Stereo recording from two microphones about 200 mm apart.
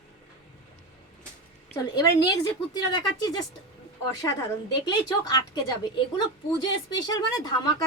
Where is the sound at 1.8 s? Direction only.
20° left (ahead or behind).